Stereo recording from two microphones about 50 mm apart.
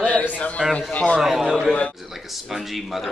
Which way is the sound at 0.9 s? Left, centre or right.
Left.